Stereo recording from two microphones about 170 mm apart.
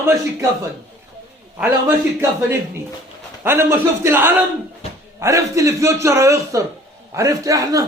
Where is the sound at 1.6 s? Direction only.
10° right (ahead or behind).